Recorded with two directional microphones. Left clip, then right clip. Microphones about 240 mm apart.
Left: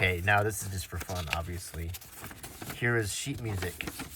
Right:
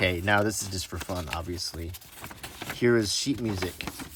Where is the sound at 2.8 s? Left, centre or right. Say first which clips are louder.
Right 6 dB; centre.